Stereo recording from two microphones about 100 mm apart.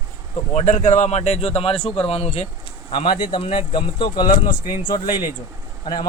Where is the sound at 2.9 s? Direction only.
55° left (ahead or behind).